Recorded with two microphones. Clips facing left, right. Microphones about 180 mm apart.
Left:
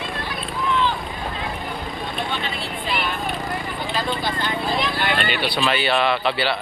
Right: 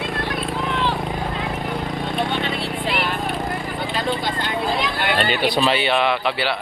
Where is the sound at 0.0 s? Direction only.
70° right (ahead or behind).